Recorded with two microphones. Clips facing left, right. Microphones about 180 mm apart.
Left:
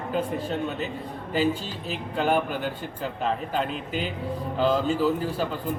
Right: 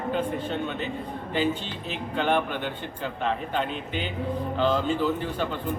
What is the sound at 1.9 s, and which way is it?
A man's voice, 5° left (ahead or behind).